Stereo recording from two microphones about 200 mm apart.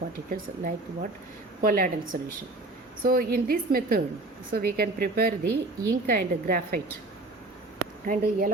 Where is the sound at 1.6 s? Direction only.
45° right (ahead or behind).